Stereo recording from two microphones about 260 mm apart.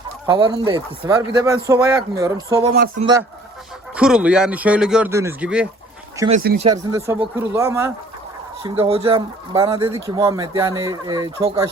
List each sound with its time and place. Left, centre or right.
0.3 s speech: centre
3.9 s speech: centre
6.1 s speech: right
8.6 s speech: right